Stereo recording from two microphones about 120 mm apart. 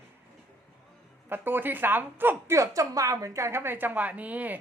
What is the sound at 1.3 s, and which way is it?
A woman's voice, 15° right (ahead or behind).